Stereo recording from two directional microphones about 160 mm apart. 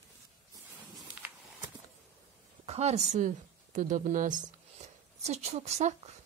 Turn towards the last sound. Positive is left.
turn(degrees=-45)  # may be behind; listen again after turning